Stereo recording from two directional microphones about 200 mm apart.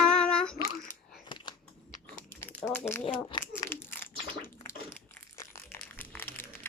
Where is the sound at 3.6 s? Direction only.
10° left (ahead or behind).